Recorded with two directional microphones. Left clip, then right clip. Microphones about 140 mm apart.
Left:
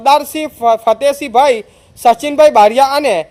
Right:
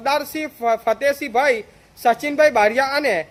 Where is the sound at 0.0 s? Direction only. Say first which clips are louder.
Left 10 dB; 30° left (ahead or behind).